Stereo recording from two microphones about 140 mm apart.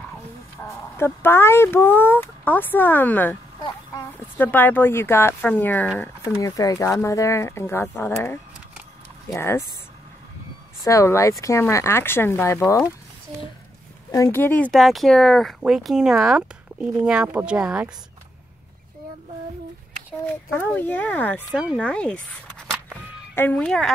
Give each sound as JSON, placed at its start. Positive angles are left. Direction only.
{"t": 0.6, "sound": "speech", "side_deg": 20}
{"t": 10.8, "sound": "speech", "side_deg": 20}
{"t": 14.1, "sound": "speech", "side_deg": 20}
{"t": 20.5, "sound": "speech", "side_deg": 15}
{"t": 21.5, "sound": "speech", "side_deg": -5}
{"t": 21.7, "sound": "speech", "side_deg": 5}